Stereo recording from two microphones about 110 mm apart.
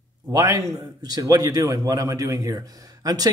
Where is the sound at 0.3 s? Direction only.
30° right (ahead or behind).